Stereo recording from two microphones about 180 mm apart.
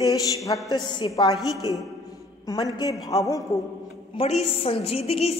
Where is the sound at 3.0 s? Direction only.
20° left (ahead or behind).